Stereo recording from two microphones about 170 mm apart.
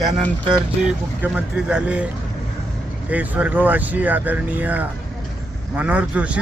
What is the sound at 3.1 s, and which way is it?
Speech, 10° right (ahead or behind).